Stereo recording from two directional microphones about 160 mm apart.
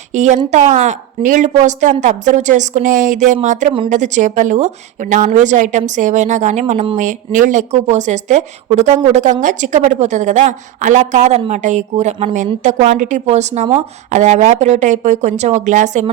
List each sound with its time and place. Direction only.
0.1 s a woman's voice: 50° right (ahead or behind)